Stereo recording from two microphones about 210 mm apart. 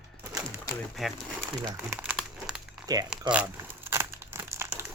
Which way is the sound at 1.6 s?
10° right (ahead or behind).